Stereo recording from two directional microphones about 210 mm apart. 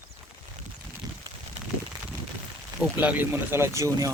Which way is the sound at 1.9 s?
20° right (ahead or behind).